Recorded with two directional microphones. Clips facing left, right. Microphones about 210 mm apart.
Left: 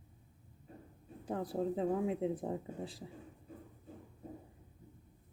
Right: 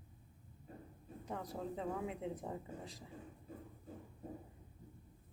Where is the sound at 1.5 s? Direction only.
35° left (ahead or behind).